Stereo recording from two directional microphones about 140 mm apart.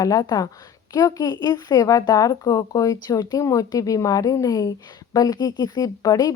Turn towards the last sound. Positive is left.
turn(degrees=25)  # may be behind; listen again after turning